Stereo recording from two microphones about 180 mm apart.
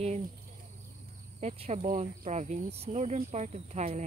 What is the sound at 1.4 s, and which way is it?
Speech, 35° right (ahead or behind).